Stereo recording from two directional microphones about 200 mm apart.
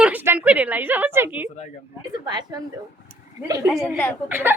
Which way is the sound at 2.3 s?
20° right (ahead or behind).